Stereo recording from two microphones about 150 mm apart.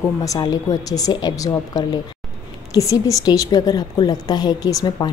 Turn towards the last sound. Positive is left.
turn(degrees=25)  # may be behind; listen again after turning